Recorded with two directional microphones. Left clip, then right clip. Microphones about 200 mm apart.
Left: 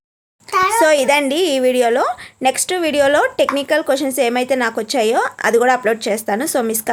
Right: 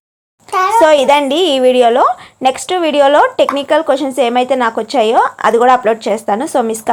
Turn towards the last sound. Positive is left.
turn(degrees=0)  # may be behind; listen again after turning